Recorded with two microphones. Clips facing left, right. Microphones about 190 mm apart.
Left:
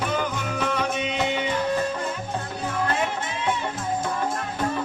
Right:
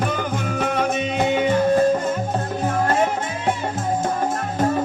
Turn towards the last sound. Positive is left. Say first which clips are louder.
# right 6 dB
turn(degrees=-40)  # may be behind; listen again after turning